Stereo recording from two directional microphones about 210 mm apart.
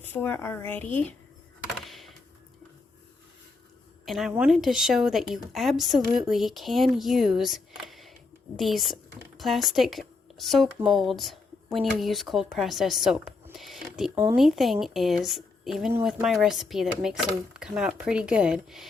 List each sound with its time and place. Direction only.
0.0 s a woman's voice: 10° left (ahead or behind)
1.8 s a sound: centre (ahead or behind)
4.0 s speech: centre (ahead or behind)